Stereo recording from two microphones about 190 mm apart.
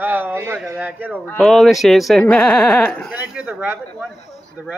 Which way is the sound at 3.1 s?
5° right (ahead or behind).